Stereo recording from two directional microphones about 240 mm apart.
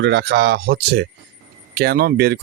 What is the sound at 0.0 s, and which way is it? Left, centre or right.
Speech, right.